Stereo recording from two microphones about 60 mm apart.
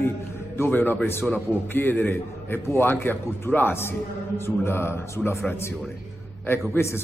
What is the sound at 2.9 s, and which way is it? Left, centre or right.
A man's voice, left.